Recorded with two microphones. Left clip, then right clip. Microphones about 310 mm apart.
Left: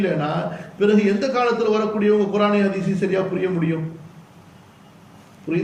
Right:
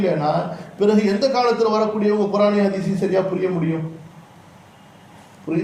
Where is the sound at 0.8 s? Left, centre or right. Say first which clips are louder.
Right 1 dB; centre.